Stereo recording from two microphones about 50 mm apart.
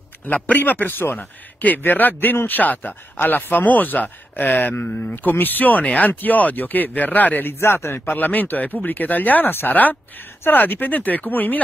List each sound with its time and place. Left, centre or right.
0.3 s speech: left
7.6 s speech: left